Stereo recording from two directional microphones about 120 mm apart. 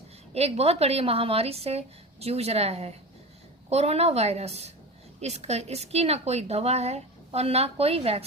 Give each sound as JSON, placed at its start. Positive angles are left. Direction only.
{"t": 0.3, "sound": "a woman's voice", "side_deg": -60}